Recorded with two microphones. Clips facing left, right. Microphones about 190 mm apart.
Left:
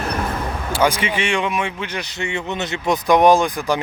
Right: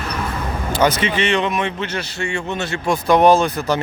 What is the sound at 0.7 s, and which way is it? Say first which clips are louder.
A man's voice: right 2 dB; 10° left (ahead or behind).